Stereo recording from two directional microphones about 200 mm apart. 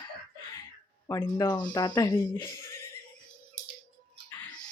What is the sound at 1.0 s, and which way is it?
Speech, 15° left (ahead or behind).